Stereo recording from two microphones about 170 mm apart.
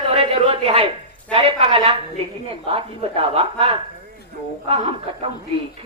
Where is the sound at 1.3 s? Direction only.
35° right (ahead or behind).